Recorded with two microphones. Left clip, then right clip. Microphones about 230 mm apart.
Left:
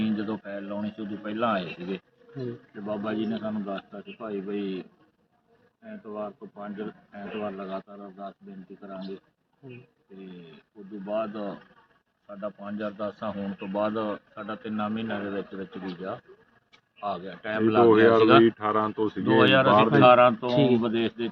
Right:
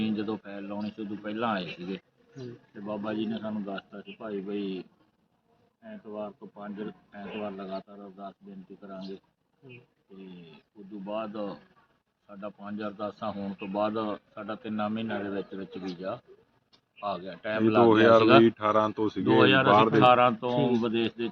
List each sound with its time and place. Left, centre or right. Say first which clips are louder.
0.0 s a man's voice: left 1 dB; centre
5.9 s a man's voice: left 3 dB; centre
11.1 s a man's voice: left 4 dB; centre
18.4 s speech: even; right
19.2 s a man's voice: left 2 dB; centre